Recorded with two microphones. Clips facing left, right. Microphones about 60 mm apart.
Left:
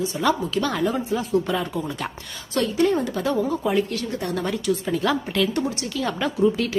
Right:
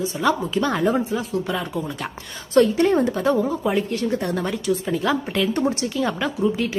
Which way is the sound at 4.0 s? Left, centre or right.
Right.